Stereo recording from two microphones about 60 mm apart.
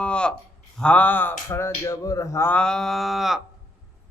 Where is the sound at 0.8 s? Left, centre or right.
Left.